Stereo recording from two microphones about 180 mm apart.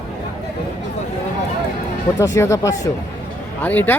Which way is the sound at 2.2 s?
15° left (ahead or behind).